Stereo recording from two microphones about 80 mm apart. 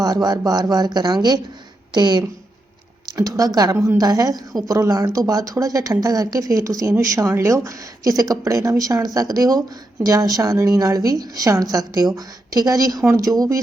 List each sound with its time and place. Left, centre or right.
0.0 s speech: right
3.1 s speech: right